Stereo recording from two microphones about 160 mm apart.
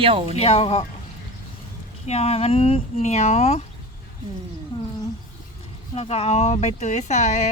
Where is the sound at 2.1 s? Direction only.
40° left (ahead or behind).